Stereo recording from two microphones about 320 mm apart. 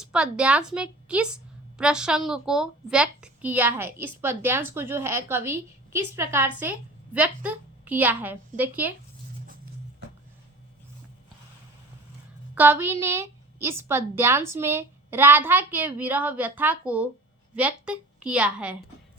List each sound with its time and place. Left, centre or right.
0.0 s a woman's voice: centre
12.5 s a woman's voice: centre